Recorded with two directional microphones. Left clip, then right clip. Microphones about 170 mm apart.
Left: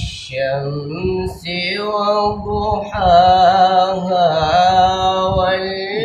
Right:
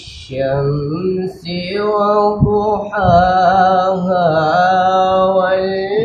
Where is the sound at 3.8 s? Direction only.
30° left (ahead or behind).